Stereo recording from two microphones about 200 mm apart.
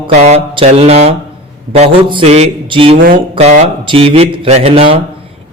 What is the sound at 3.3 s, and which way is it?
A man's voice, 30° right (ahead or behind).